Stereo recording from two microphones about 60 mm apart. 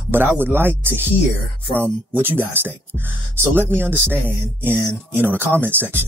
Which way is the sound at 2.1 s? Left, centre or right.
Right.